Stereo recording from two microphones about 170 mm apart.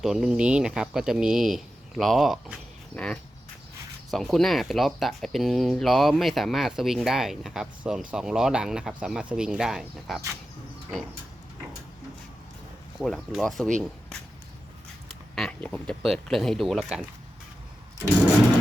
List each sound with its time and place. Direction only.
0.0 s speech: centre (ahead or behind)
13.0 s speech: centre (ahead or behind)
15.4 s speech: 5° left (ahead or behind)